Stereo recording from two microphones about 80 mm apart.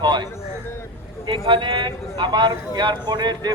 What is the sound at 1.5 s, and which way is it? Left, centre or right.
Speech, right.